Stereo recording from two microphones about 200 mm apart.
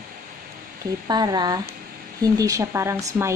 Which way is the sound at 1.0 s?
20° right (ahead or behind).